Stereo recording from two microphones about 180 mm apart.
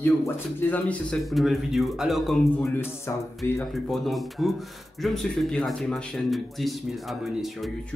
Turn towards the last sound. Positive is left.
turn(degrees=0)  # may be behind; listen again after turning